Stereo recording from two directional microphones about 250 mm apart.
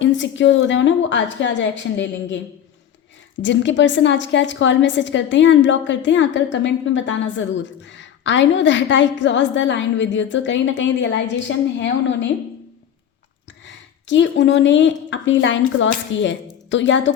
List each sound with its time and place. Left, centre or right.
0.0 s a woman's voice: left
3.4 s a woman's voice: left
14.1 s a woman's voice: left